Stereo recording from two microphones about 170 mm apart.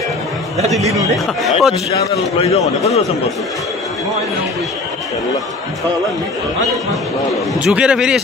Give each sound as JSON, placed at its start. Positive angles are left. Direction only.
{"t": 0.9, "sound": "speech", "side_deg": 0}
{"t": 2.3, "sound": "a man's voice", "side_deg": 40}
{"t": 7.6, "sound": "speech", "side_deg": -5}